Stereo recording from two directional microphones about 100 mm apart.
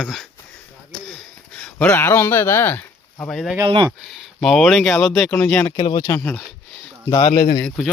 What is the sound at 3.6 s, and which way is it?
Speech, 55° right (ahead or behind).